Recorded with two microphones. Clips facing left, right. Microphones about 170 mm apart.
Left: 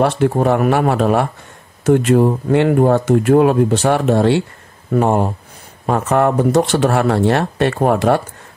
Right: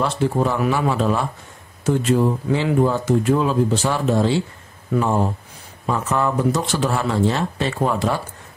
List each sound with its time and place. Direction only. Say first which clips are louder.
0.0 s speech: left 5 dB; 60° left (ahead or behind)